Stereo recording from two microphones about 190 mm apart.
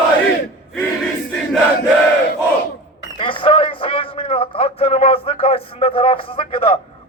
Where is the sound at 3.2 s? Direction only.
25° left (ahead or behind).